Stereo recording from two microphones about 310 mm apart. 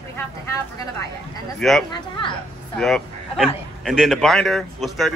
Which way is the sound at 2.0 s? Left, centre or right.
Centre.